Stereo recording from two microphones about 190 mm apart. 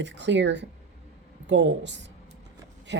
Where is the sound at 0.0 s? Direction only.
70° right (ahead or behind).